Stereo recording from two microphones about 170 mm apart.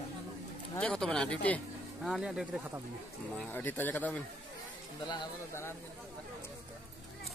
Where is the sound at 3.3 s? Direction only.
10° left (ahead or behind).